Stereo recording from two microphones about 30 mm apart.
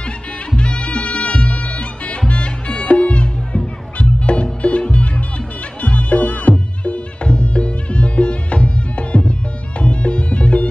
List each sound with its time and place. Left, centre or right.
0.6 s music: left